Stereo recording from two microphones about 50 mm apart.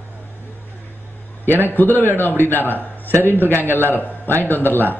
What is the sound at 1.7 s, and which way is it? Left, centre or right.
A man's voice, left.